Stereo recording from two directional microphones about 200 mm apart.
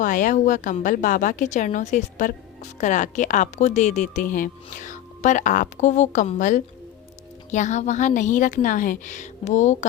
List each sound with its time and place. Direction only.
0.0 s a woman's voice: 40° left (ahead or behind)